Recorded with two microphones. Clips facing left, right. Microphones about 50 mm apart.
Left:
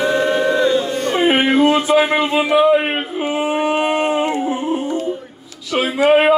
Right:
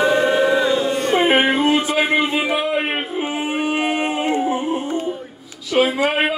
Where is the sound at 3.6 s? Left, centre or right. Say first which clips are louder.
Left 2 dB; centre.